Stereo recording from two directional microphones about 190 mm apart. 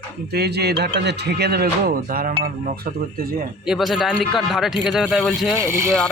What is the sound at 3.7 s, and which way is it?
Speech, centre (ahead or behind).